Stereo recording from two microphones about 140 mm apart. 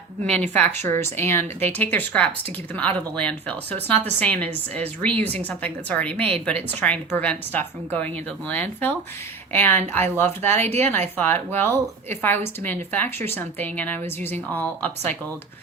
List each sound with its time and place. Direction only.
0.3 s a woman's voice: 10° left (ahead or behind)